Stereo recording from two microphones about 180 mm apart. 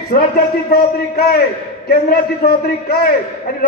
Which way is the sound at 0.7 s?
60° left (ahead or behind).